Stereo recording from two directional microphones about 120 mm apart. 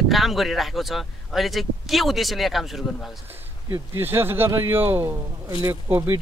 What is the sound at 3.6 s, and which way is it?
Speech, 20° right (ahead or behind).